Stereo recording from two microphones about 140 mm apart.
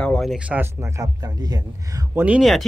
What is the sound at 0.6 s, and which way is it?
Speech, 20° right (ahead or behind).